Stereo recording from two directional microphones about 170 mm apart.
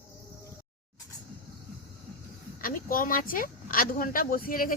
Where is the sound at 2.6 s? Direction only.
55° left (ahead or behind).